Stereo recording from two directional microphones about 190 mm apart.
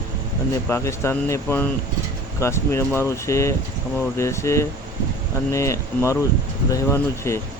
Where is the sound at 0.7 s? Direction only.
15° left (ahead or behind).